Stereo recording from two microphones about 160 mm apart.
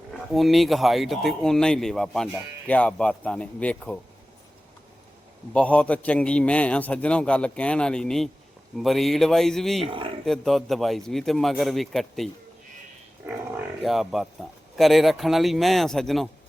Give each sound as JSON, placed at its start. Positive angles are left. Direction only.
{"t": 0.1, "sound": "a man's voice", "side_deg": 0}
{"t": 5.5, "sound": "a man's voice", "side_deg": 10}
{"t": 9.8, "sound": "speech", "side_deg": -30}
{"t": 10.2, "sound": "speech", "side_deg": 0}